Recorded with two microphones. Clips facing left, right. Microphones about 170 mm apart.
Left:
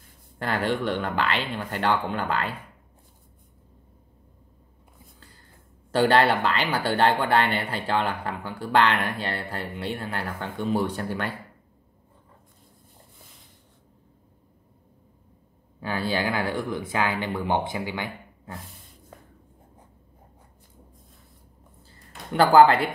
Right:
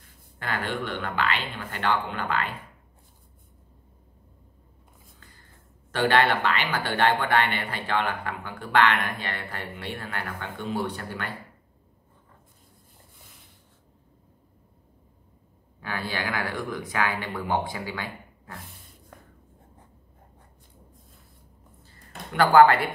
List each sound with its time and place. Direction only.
0.4 s speech: 40° left (ahead or behind)
5.9 s speech: 35° left (ahead or behind)
15.8 s speech: 30° left (ahead or behind)
22.3 s speech: 30° left (ahead or behind)